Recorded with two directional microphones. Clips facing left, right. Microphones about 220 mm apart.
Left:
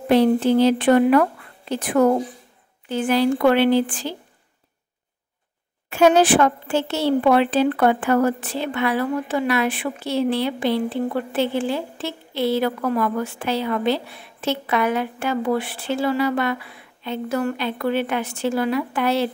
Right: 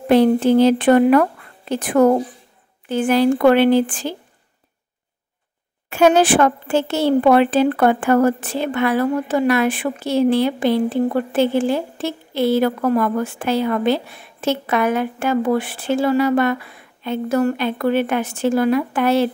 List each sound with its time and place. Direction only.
0.1 s speech: 50° right (ahead or behind)
5.9 s speech: 50° right (ahead or behind)